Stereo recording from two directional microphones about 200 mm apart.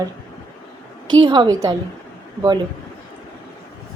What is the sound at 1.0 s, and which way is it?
Speech, 20° right (ahead or behind).